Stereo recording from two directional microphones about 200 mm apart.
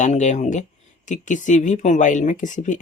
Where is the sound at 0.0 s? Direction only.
35° left (ahead or behind).